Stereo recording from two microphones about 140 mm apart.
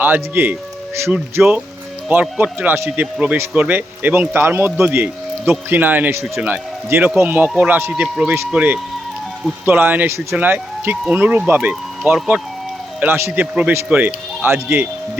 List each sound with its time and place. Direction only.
0.0 s speech: 15° right (ahead or behind)